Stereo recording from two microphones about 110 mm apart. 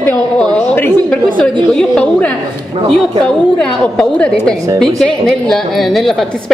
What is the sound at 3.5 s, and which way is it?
A woman's voice, 10° left (ahead or behind).